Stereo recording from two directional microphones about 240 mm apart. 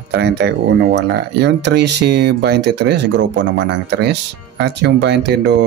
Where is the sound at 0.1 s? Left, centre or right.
Right.